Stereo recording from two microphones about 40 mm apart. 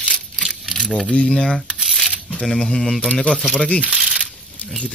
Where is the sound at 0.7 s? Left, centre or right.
Centre.